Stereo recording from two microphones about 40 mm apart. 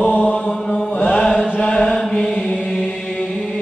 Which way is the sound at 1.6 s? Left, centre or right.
Left.